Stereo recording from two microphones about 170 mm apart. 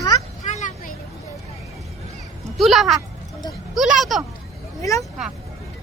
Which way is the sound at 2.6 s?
Centre (ahead or behind).